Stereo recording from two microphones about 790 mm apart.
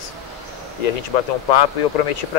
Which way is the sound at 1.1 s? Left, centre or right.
Left.